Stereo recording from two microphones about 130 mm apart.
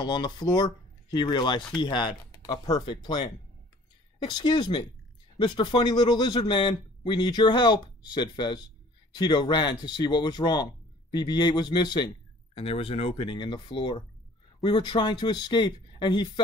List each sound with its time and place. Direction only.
0.0 s speech: 35° left (ahead or behind)
12.5 s speech: 50° left (ahead or behind)